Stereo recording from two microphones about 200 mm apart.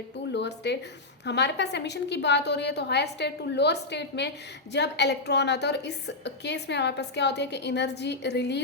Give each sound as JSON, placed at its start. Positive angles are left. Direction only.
{"t": 0.3, "sound": "a woman's voice", "side_deg": 60}